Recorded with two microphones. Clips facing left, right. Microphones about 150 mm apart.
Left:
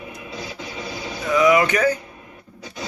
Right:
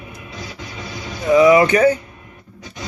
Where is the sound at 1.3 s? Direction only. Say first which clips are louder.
Right 5 dB; 30° right (ahead or behind).